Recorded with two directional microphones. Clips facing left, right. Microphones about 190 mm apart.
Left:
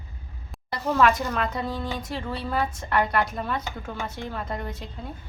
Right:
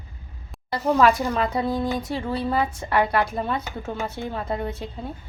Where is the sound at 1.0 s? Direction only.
30° right (ahead or behind).